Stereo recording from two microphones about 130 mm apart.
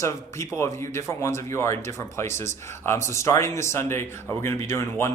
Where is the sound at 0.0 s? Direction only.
20° left (ahead or behind).